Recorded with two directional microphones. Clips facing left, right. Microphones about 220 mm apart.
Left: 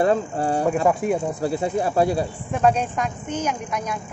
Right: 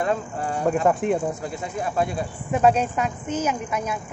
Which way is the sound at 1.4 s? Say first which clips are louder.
Left 7 dB; 30° left (ahead or behind).